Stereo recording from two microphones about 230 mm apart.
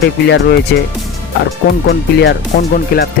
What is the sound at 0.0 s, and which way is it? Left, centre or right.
Speech, left.